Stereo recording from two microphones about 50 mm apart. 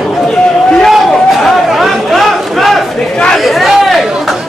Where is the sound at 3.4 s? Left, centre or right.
Centre.